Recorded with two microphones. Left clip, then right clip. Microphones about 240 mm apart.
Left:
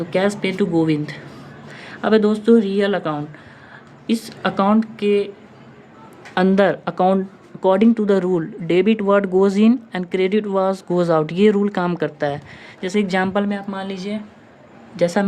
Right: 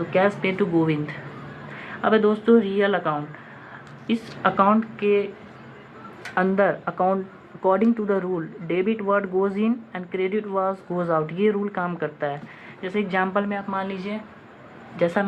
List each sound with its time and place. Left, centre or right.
0.1 s speech: left
6.3 s speech: left